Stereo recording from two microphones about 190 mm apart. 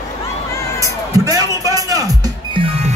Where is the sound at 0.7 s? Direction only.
20° right (ahead or behind).